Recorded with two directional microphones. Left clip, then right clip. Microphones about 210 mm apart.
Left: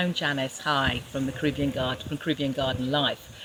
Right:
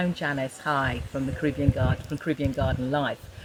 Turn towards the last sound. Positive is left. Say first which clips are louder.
# left 1 dB
turn(degrees=-5)  # may be behind; listen again after turning